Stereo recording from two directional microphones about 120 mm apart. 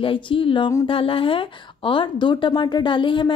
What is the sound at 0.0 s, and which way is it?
Speech, 45° left (ahead or behind).